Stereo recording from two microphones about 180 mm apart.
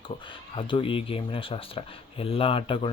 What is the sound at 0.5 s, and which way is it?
Speech, 30° left (ahead or behind).